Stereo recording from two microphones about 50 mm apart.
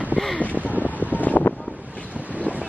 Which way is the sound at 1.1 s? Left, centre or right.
Left.